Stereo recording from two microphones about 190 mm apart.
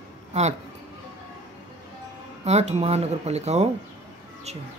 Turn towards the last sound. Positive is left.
turn(degrees=-35)  # may be behind; listen again after turning